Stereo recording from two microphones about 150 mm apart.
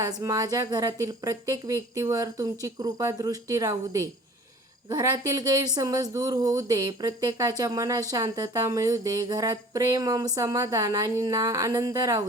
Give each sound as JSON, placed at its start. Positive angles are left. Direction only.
{"t": 0.2, "sound": "speech", "side_deg": -25}